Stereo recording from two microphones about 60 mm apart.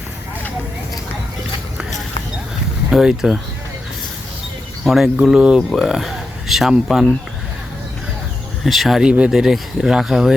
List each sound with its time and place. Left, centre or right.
2.9 s speech: centre
4.9 s speech: centre
8.6 s speech: centre
9.0 s speech: centre
9.3 s speech: centre